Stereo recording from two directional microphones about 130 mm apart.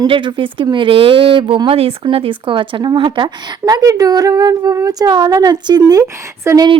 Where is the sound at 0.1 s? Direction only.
40° right (ahead or behind); by 6.7 s 25° right (ahead or behind).